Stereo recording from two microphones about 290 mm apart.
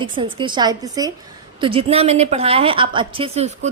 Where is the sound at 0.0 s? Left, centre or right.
Centre.